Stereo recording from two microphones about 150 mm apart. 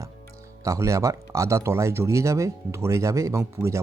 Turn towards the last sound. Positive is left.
turn(degrees=-20)  # may be behind; listen again after turning